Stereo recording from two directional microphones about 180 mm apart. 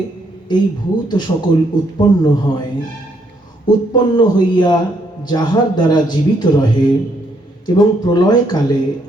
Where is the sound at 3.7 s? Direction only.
25° left (ahead or behind).